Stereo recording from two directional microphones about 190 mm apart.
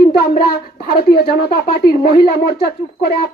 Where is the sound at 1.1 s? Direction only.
55° left (ahead or behind).